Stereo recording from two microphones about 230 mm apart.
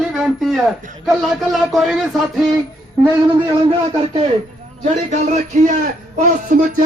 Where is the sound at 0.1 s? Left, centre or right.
Centre.